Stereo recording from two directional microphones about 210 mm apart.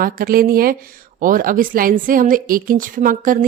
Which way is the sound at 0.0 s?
45° right (ahead or behind).